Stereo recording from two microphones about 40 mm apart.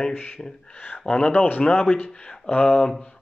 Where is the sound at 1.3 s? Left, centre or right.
Left.